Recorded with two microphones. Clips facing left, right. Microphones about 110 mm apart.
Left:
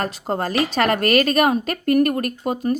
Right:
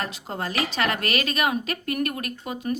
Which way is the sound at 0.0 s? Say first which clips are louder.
Left 7 dB; 45° left (ahead or behind).